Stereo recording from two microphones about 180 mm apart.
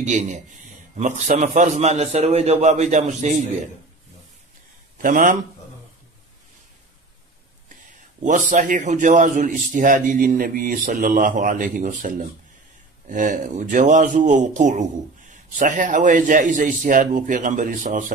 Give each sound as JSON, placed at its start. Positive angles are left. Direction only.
{"t": 0.0, "sound": "a man's voice", "side_deg": -40}
{"t": 5.0, "sound": "speech", "side_deg": -45}
{"t": 8.2, "sound": "speech", "side_deg": -45}